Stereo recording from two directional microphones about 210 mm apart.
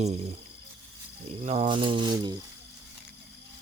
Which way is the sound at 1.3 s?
30° right (ahead or behind).